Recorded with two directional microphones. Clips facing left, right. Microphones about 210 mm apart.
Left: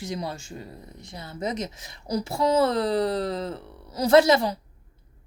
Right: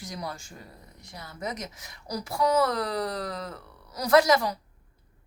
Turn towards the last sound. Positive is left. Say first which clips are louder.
# left 3 dB
turn(degrees=25)  # may be behind; listen again after turning